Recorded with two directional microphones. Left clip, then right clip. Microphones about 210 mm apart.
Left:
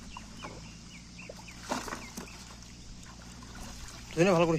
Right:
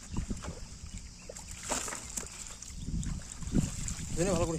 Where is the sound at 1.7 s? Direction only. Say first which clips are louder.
Left 1 dB; 25° right (ahead or behind).